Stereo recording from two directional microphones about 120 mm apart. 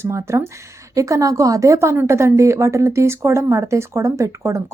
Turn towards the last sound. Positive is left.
turn(degrees=-25)  # may be behind; listen again after turning